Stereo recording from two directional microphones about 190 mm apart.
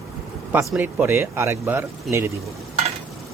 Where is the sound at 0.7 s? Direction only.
10° right (ahead or behind).